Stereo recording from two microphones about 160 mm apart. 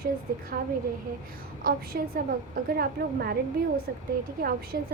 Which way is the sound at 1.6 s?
65° right (ahead or behind).